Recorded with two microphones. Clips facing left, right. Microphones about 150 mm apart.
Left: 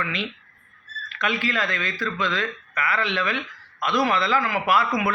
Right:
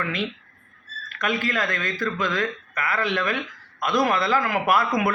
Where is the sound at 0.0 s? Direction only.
50° right (ahead or behind).